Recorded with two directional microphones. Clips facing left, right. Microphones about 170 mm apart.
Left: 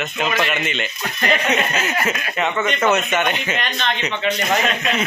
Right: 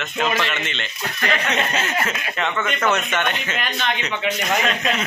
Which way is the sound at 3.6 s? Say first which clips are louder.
Left 1 dB; 10° right (ahead or behind).